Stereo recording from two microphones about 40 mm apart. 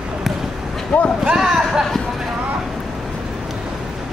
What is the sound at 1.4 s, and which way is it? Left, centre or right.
Speech, centre.